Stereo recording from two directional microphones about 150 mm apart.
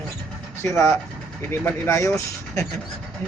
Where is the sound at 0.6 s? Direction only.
20° left (ahead or behind).